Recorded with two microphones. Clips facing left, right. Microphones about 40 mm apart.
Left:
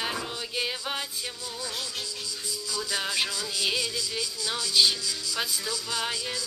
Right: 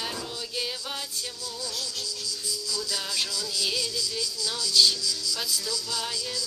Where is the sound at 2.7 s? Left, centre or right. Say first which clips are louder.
Left 4 dB; left.